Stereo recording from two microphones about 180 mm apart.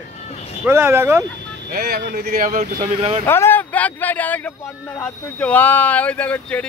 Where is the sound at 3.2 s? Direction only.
15° left (ahead or behind).